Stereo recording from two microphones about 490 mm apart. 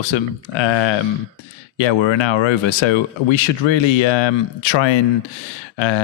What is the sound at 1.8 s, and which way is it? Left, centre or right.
Speech, left.